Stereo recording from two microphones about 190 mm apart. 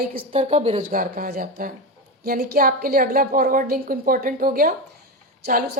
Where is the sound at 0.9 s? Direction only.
50° right (ahead or behind).